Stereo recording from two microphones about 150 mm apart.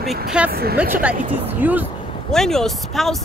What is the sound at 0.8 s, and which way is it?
Speech, 10° right (ahead or behind).